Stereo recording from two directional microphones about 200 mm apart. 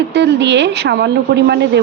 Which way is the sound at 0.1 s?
60° right (ahead or behind).